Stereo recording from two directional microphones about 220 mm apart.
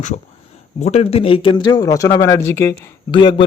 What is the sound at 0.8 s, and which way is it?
A man's voice, 30° left (ahead or behind).